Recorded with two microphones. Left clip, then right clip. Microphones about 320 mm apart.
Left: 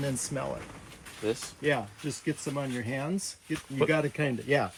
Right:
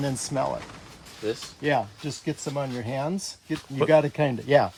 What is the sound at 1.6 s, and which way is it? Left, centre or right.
Speech, right.